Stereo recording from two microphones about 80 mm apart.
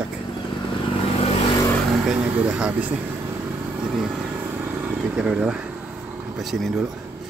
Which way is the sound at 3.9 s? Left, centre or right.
Centre.